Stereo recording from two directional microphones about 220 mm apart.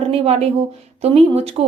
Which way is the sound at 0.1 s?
30° right (ahead or behind).